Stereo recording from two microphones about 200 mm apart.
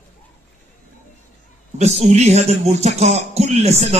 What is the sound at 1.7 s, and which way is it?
A man's voice, 35° right (ahead or behind).